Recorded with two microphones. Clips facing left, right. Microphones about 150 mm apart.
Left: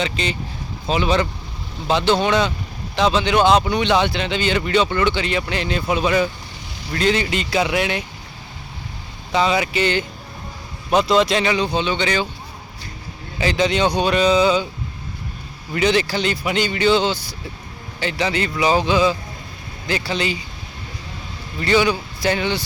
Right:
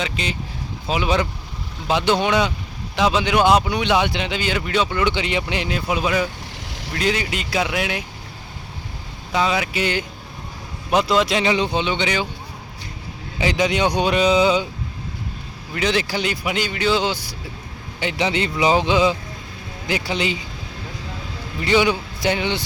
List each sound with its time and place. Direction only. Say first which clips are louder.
0.0 s a man's voice: left 3 dB; 5° right (ahead or behind)
9.3 s a man's voice: left 2 dB; centre (ahead or behind)
11.4 s a man's voice: even; 20° right (ahead or behind)
13.4 s speech: left 1 dB; 15° right (ahead or behind)
15.7 s a man's voice: left 3 dB; centre (ahead or behind)
16.0 s a man's voice: left 2 dB; 10° right (ahead or behind)
21.6 s speech: even; 15° right (ahead or behind)